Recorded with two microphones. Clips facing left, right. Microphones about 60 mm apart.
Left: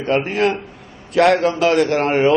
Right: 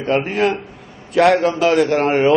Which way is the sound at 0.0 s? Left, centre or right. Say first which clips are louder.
Even; centre.